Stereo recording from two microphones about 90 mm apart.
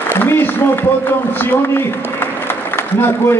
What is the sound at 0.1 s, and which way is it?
A man's voice, 25° left (ahead or behind).